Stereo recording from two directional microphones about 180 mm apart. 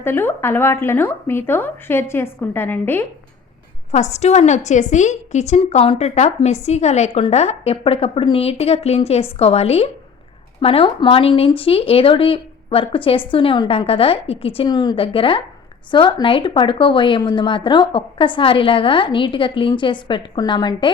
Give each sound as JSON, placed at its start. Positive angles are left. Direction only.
{"t": 0.0, "sound": "speech", "side_deg": 10}
{"t": 3.9, "sound": "a woman's voice", "side_deg": 40}